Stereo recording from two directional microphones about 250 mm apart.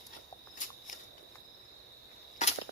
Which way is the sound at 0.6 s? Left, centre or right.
Left.